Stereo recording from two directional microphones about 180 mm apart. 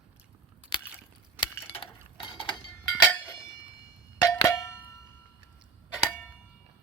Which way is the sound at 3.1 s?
10° left (ahead or behind).